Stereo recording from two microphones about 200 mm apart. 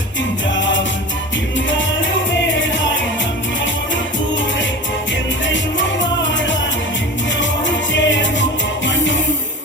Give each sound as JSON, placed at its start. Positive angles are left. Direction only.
{"t": 2.5, "sound": "music", "side_deg": 70}
{"t": 6.0, "sound": "music", "side_deg": 65}
{"t": 7.9, "sound": "music", "side_deg": 65}